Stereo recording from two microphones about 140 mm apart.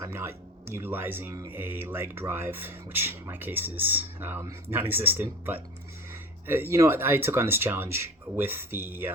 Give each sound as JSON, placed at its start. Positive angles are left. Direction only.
{"t": 0.0, "sound": "speech", "side_deg": -20}